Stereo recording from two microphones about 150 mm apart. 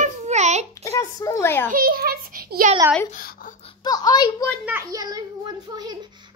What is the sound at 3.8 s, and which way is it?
Speech, 25° left (ahead or behind).